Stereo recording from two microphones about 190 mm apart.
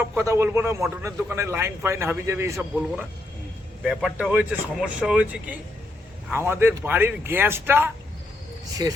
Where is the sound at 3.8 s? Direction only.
5° right (ahead or behind).